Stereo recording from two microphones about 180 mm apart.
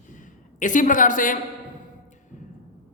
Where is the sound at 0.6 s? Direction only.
45° left (ahead or behind).